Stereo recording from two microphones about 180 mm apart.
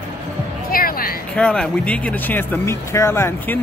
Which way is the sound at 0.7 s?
55° left (ahead or behind).